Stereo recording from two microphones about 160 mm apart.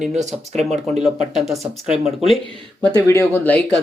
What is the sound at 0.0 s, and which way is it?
Speech, 45° right (ahead or behind).